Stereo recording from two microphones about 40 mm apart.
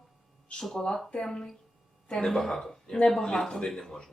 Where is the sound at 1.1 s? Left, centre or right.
Centre.